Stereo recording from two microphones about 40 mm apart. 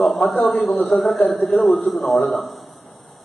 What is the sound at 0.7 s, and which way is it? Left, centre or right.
Speech, left.